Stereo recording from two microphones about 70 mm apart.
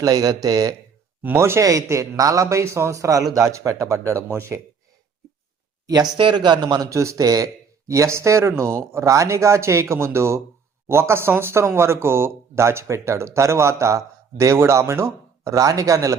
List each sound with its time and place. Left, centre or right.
0.0 s speech: right
1.4 s speech: right
5.8 s speech: right
6.3 s a man's voice: right
6.9 s speech: right